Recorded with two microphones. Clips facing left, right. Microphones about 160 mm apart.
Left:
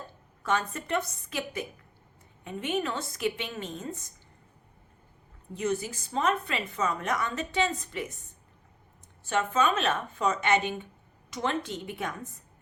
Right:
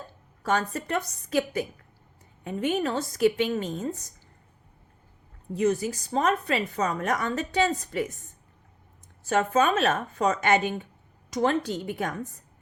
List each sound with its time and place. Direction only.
0.4 s a woman's voice: 40° right (ahead or behind)
5.5 s a woman's voice: 40° right (ahead or behind)
9.3 s a woman's voice: 45° right (ahead or behind)